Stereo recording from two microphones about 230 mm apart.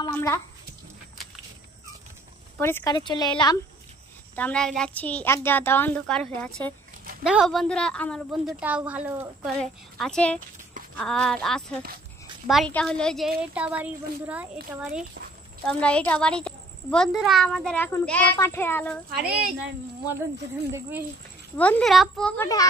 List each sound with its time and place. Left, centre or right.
0.0 s a sound: centre
2.6 s a woman's voice: centre
4.4 s a woman's voice: centre
9.6 s a child's voice: centre
19.1 s a child's voice: centre
21.5 s a child's voice: centre